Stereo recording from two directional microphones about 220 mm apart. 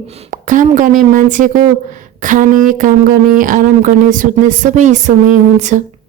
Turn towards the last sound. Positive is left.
turn(degrees=-35)  # may be behind; listen again after turning